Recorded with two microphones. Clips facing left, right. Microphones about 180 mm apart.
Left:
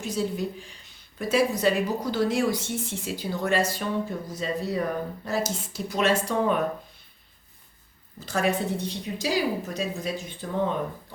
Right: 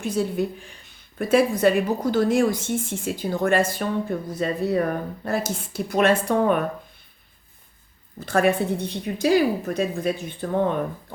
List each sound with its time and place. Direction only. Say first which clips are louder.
0.0 s a woman's voice: right 4 dB; 55° right (ahead or behind)
8.2 s a woman's voice: right 5 dB; 55° right (ahead or behind)